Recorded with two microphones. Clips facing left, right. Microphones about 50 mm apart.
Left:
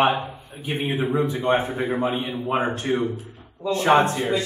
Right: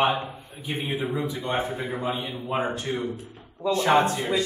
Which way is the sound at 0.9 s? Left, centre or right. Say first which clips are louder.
Left 6 dB; centre.